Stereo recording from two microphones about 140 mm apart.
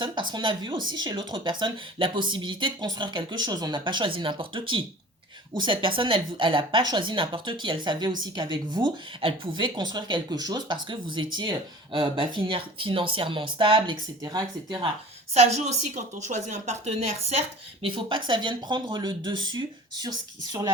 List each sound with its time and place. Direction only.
0.0 s speech: 35° right (ahead or behind)
15.4 s a woman's voice: 50° right (ahead or behind)
17.8 s speech: 35° right (ahead or behind)